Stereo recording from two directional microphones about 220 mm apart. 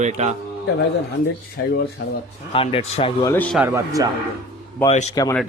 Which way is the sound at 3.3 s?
5° left (ahead or behind).